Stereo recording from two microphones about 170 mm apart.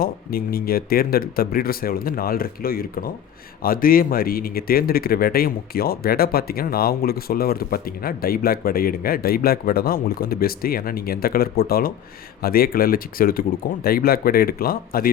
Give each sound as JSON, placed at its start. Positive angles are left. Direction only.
{"t": 0.0, "sound": "speech", "side_deg": 60}